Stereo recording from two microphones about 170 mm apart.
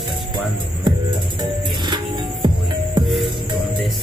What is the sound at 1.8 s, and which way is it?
Music, 25° right (ahead or behind).